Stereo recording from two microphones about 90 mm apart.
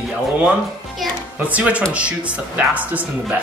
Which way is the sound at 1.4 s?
15° right (ahead or behind).